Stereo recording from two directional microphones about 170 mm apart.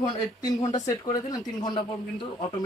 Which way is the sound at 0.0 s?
25° left (ahead or behind).